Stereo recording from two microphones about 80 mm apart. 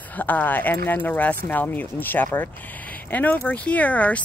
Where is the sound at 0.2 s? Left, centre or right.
Left.